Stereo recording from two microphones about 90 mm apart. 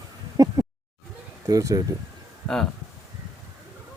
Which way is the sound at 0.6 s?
40° right (ahead or behind).